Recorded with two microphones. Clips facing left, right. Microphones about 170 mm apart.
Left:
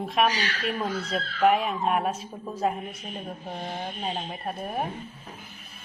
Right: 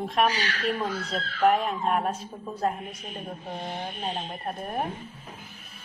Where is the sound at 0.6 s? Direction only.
5° left (ahead or behind).